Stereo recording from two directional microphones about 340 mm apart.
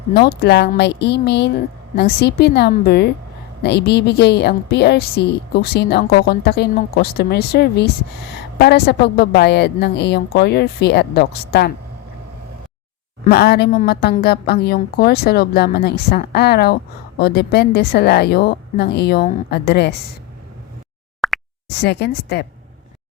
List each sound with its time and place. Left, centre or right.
0.1 s a woman's voice: left
13.2 s a woman's voice: left
21.2 s plop: centre
21.7 s a woman's voice: left